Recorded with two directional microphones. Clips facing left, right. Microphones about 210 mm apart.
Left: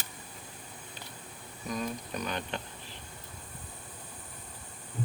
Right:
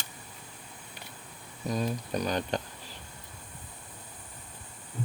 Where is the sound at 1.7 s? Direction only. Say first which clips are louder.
Right 4 dB; 35° right (ahead or behind).